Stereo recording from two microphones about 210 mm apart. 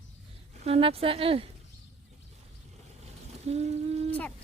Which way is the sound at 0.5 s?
30° right (ahead or behind).